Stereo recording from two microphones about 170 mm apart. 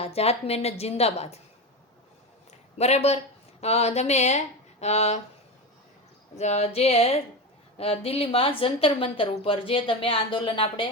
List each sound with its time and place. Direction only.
0.0 s a woman's voice: 35° left (ahead or behind)
2.7 s a woman's voice: 40° left (ahead or behind)
6.3 s a woman's voice: 40° left (ahead or behind)